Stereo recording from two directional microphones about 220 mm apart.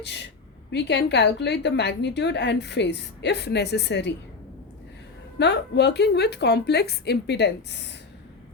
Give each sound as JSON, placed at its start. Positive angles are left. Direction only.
{"t": 0.0, "sound": "a woman's voice", "side_deg": 50}
{"t": 5.4, "sound": "a woman's voice", "side_deg": 50}